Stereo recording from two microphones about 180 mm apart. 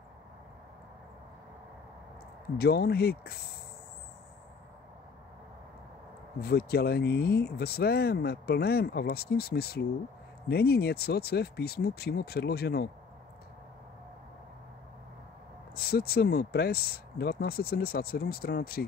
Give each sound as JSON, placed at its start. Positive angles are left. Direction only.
{"t": 2.5, "sound": "speech", "side_deg": 60}
{"t": 6.4, "sound": "speech", "side_deg": 60}
{"t": 15.7, "sound": "speech", "side_deg": 60}